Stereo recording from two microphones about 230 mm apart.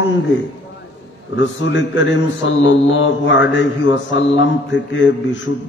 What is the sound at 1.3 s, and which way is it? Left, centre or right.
A man's voice, left.